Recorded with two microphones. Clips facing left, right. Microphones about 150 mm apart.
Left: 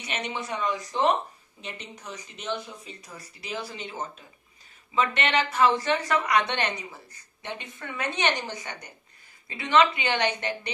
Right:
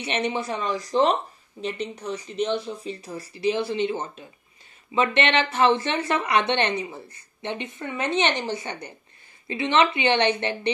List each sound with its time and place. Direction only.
0.0 s speech: 30° right (ahead or behind)
5.3 s a woman's voice: 25° right (ahead or behind)